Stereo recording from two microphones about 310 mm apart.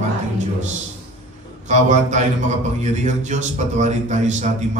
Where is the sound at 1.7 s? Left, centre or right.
Right.